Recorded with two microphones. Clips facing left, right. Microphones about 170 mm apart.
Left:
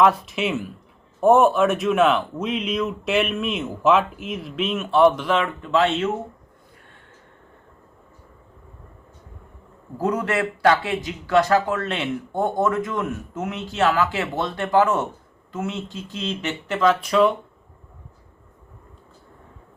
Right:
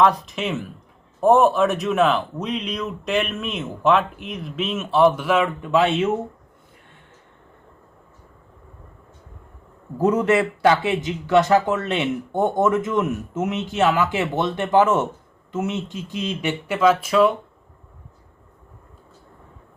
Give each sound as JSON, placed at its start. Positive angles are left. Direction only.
{"t": 0.0, "sound": "speech", "side_deg": 5}
{"t": 10.0, "sound": "speech", "side_deg": -20}